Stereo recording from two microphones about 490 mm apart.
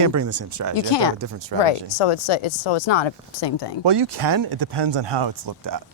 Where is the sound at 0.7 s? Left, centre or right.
Left.